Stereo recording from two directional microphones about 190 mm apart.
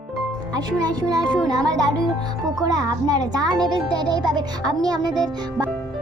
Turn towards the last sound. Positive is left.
turn(degrees=-20)  # may be behind; listen again after turning